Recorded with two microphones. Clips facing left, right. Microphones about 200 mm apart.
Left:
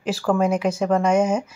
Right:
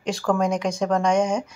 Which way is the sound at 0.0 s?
5° left (ahead or behind).